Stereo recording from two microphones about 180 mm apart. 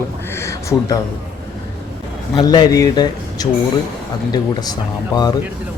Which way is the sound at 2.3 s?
20° left (ahead or behind).